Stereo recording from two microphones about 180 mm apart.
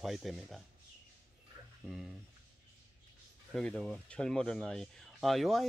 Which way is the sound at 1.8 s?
5° right (ahead or behind).